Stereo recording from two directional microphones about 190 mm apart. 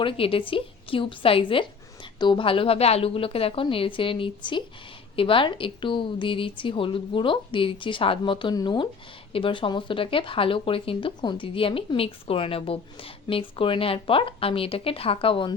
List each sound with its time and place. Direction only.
0.0 s speech: 30° left (ahead or behind)